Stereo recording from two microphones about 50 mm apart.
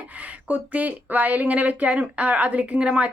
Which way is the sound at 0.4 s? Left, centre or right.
Right.